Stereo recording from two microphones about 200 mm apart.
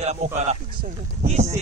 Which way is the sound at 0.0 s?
35° right (ahead or behind).